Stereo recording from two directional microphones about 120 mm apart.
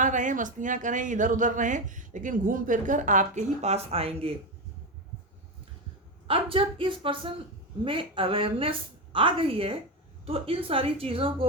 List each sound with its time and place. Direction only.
0.0 s speech: 90° right; by 4.4 s 55° right (ahead or behind)
6.2 s a woman's voice: 50° right (ahead or behind)